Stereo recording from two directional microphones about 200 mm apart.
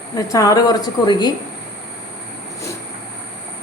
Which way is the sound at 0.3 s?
15° left (ahead or behind).